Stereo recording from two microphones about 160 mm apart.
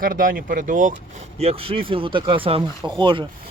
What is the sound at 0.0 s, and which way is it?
Speech, 60° right (ahead or behind).